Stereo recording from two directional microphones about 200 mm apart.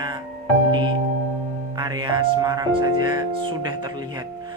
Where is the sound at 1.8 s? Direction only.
20° right (ahead or behind).